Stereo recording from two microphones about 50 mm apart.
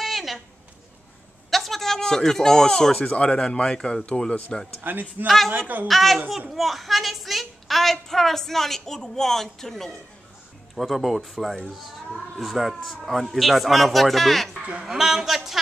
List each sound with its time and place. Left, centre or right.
0.0 s a sound: centre
1.5 s a sound: centre
3.2 s speech: centre
5.2 s a woman's voice: right
5.9 s a woman's voice: centre
14.6 s speech: right
14.9 s a woman's voice: centre